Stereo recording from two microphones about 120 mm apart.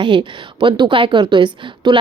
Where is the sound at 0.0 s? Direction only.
40° right (ahead or behind).